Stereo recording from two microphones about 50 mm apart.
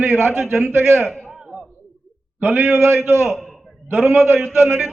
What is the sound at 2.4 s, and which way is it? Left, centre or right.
A man's voice, right.